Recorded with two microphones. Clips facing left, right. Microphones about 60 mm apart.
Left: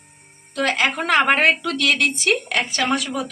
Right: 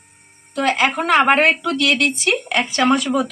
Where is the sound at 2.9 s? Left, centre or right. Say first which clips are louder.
Right 5 dB; right.